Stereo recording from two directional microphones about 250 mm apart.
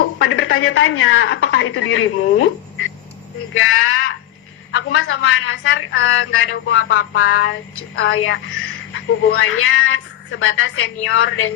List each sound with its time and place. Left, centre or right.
0.2 s a woman's voice: left
3.5 s a woman's voice: left